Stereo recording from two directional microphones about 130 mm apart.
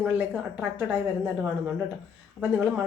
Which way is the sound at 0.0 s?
10° right (ahead or behind).